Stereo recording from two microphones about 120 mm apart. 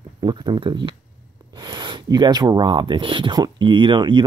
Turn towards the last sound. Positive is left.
turn(degrees=-40)  # may be behind; listen again after turning